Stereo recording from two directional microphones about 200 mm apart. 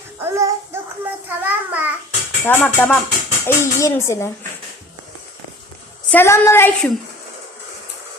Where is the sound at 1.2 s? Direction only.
10° right (ahead or behind).